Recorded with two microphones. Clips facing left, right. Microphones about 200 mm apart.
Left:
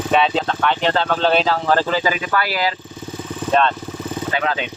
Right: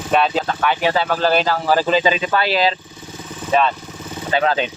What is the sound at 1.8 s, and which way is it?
Speech, 20° right (ahead or behind).